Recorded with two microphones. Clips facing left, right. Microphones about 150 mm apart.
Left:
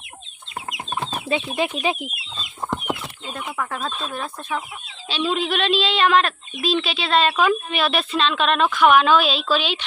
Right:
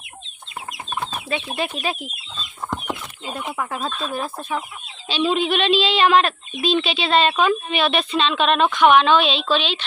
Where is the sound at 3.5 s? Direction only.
10° right (ahead or behind).